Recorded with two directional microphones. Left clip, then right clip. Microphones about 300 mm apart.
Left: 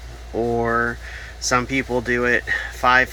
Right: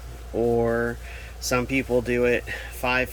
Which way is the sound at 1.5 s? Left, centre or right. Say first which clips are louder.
Left 4 dB; centre.